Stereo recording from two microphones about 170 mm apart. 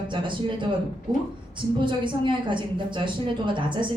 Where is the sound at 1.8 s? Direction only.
30° right (ahead or behind).